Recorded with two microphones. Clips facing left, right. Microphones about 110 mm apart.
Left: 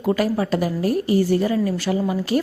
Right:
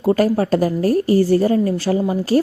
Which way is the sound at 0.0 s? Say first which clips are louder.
Right 4 dB; 40° right (ahead or behind).